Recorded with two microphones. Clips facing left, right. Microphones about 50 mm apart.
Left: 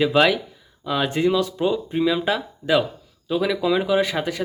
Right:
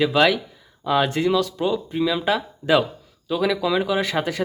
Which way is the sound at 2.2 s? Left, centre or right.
Centre.